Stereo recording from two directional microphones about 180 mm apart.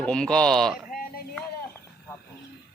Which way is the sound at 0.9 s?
55° left (ahead or behind).